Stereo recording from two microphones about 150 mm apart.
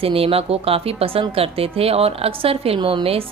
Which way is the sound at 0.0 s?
40° right (ahead or behind).